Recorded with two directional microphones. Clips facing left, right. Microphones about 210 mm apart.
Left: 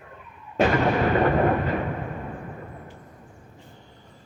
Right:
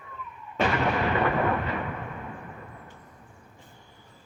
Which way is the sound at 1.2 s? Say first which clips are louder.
Left 5 dB; 40° left (ahead or behind).